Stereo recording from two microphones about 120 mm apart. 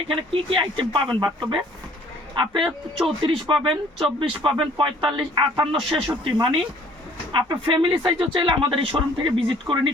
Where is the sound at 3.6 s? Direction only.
45° right (ahead or behind).